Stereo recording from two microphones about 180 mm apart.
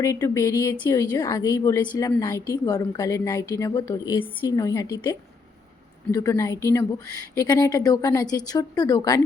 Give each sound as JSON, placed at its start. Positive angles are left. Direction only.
{"t": 0.0, "sound": "a woman's voice", "side_deg": 15}